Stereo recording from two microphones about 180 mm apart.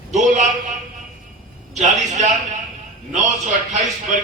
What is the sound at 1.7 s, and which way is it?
Speech, 40° right (ahead or behind).